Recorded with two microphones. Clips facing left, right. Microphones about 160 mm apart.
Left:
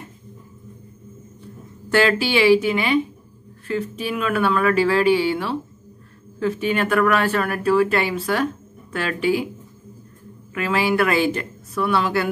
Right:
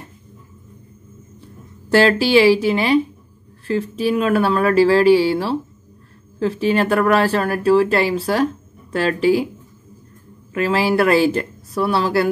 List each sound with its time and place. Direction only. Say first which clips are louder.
1.9 s speech: right 4 dB; 35° right (ahead or behind)
10.5 s speech: right 3 dB; 35° right (ahead or behind)